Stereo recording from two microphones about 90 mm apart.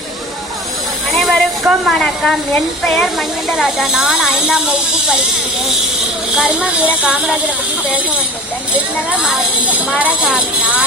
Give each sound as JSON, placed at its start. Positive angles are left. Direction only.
{"t": 1.1, "sound": "a sound", "side_deg": 0}
{"t": 2.8, "sound": "speech", "side_deg": 5}
{"t": 6.3, "sound": "speech", "side_deg": -15}
{"t": 9.0, "sound": "speech", "side_deg": -15}